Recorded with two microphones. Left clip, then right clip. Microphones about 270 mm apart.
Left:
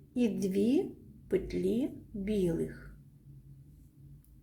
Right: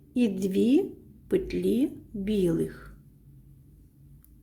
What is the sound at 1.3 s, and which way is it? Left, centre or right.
A woman's voice, centre.